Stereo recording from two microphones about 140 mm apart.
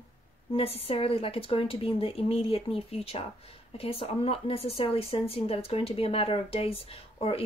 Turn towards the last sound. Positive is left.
turn(degrees=45)  # may be behind; listen again after turning